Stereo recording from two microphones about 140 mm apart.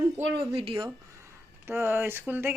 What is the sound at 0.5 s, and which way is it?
Speech, 40° right (ahead or behind).